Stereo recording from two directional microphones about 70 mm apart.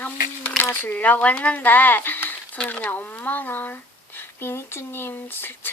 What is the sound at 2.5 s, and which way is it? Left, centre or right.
A woman's voice, centre.